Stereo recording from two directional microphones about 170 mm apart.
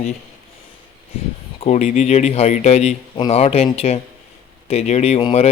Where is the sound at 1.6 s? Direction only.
40° left (ahead or behind).